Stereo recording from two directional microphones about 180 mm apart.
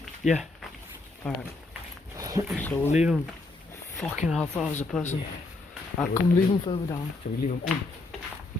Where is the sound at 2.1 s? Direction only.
20° right (ahead or behind).